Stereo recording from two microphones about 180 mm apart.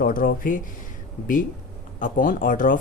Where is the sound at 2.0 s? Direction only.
50° left (ahead or behind).